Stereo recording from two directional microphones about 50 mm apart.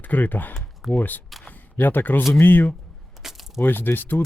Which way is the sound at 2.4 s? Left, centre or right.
Left.